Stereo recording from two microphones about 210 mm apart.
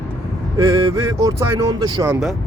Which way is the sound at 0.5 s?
15° right (ahead or behind).